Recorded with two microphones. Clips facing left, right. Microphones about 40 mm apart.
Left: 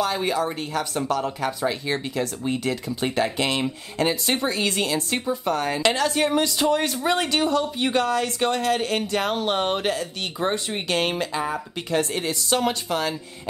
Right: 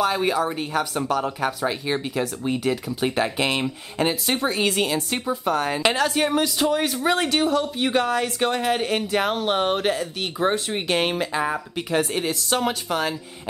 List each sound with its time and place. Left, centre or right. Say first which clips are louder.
0.0 s speech: right 2 dB; centre
11.3 s speech: right 2 dB; centre